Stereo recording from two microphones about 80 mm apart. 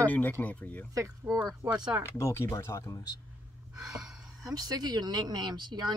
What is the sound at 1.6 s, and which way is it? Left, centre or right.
Speech, right.